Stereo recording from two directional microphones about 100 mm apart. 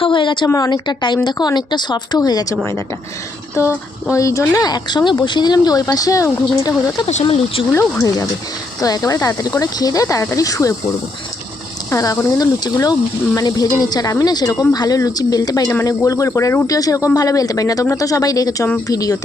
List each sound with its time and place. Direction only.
0.0 s a woman's voice: 55° left (ahead or behind)
0.4 s speech: 35° left (ahead or behind)
0.9 s speech: 50° left (ahead or behind)
4.1 s speech: 30° left (ahead or behind)
8.8 s speech: 35° left (ahead or behind)
11.9 s speech: 30° left (ahead or behind)